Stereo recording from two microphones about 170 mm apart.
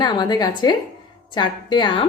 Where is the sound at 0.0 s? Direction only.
25° left (ahead or behind).